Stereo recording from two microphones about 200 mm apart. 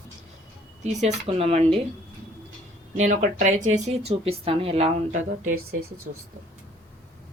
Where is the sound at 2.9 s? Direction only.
40° right (ahead or behind).